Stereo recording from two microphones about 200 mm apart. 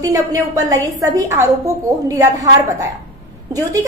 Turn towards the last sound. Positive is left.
turn(degrees=-15)  # may be behind; listen again after turning